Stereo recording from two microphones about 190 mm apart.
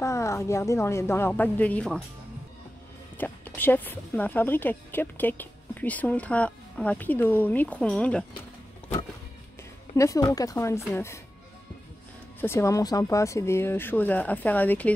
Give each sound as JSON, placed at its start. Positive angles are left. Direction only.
{"t": 0.0, "sound": "a woman's voice", "side_deg": 15}
{"t": 3.2, "sound": "a woman's voice", "side_deg": 10}
{"t": 9.9, "sound": "a woman's voice", "side_deg": 15}
{"t": 12.4, "sound": "a woman's voice", "side_deg": 15}